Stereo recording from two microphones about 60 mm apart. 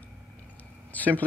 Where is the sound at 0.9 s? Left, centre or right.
Left.